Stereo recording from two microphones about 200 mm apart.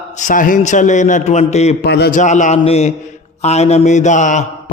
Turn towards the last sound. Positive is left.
turn(degrees=40)  # may be behind; listen again after turning